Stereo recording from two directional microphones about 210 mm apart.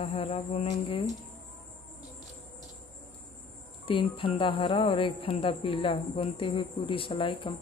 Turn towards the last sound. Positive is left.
turn(degrees=25)  # may be behind; listen again after turning